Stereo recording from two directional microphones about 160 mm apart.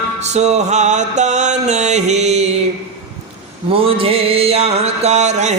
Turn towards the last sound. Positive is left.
turn(degrees=-45)  # may be behind; listen again after turning